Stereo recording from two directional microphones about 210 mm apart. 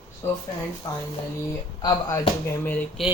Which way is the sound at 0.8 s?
15° left (ahead or behind).